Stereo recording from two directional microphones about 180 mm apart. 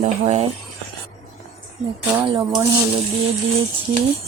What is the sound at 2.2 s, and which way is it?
Speech, 25° right (ahead or behind).